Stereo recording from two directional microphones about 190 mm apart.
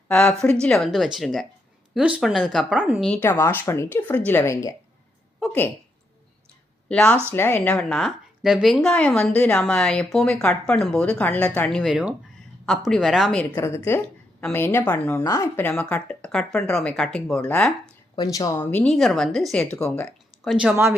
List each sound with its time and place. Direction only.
0.1 s a woman's voice: 5° left (ahead or behind)
3.0 s a woman's voice: 5° left (ahead or behind)
6.8 s a woman's voice: 5° left (ahead or behind)
13.4 s a woman's voice: 15° left (ahead or behind)
18.2 s speech: 20° left (ahead or behind)
18.7 s a woman's voice: 5° left (ahead or behind)